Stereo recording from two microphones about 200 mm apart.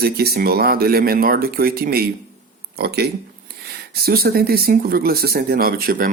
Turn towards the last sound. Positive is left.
turn(degrees=-45)  # may be behind; listen again after turning